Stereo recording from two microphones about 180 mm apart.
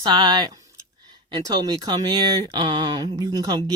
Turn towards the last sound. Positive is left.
turn(degrees=-20)  # may be behind; listen again after turning